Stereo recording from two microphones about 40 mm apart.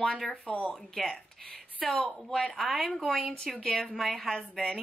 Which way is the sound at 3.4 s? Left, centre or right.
Centre.